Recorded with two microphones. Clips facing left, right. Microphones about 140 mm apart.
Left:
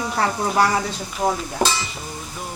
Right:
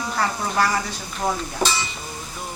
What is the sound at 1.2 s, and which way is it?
Speech, 15° left (ahead or behind).